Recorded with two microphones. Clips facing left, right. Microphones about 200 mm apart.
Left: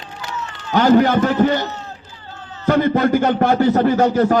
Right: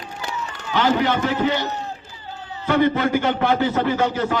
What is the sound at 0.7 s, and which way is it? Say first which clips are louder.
Speech: left 7 dB; 45° left (ahead or behind).